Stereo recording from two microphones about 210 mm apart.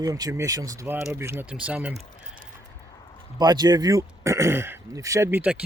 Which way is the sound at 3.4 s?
20° right (ahead or behind).